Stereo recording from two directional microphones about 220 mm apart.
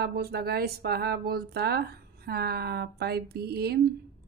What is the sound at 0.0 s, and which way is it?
Speech, 45° right (ahead or behind).